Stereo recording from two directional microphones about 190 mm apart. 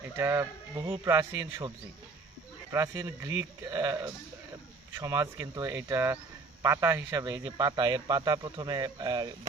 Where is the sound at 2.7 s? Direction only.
15° right (ahead or behind).